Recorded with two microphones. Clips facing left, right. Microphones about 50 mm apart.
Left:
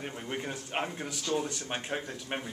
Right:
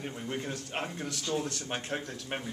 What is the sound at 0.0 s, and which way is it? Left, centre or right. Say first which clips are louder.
A man's voice: even; centre.